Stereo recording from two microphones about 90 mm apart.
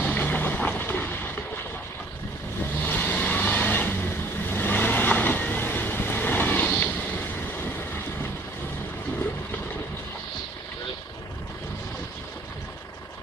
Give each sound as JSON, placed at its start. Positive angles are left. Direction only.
{"t": 0.0, "sound": "vehicle", "side_deg": 20}
{"t": 2.7, "sound": "vehicle", "side_deg": 20}